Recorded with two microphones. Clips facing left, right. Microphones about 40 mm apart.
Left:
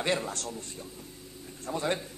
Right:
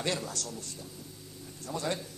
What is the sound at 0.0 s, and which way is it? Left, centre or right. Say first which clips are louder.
Speech: left 4 dB; left.